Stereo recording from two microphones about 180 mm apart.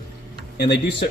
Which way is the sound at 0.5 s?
65° left (ahead or behind).